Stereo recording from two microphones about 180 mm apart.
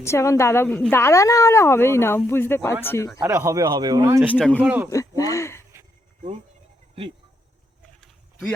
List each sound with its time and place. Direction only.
0.0 s a woman's voice: 15° left (ahead or behind)
3.2 s speech: 15° right (ahead or behind)
4.2 s speech: 5° right (ahead or behind)
4.6 s speech: 10° right (ahead or behind)
4.9 s speech: 20° left (ahead or behind)
8.0 s a sound: centre (ahead or behind)